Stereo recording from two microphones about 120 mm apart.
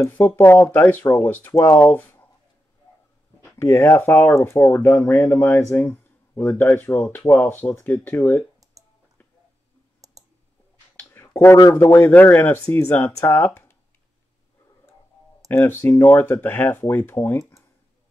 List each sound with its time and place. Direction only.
0.0 s speech: 20° left (ahead or behind)
3.5 s speech: 25° left (ahead or behind)
11.0 s a sound: 20° left (ahead or behind)
11.7 s speech: 20° left (ahead or behind)
15.5 s speech: 20° left (ahead or behind)